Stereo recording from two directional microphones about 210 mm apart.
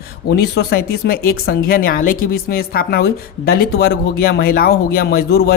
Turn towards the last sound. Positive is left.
turn(degrees=45)  # may be behind; listen again after turning